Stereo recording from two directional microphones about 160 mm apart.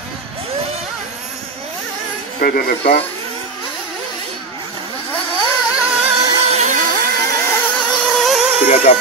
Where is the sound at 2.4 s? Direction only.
65° left (ahead or behind).